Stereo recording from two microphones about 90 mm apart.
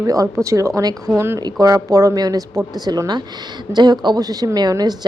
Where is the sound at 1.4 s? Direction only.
45° right (ahead or behind).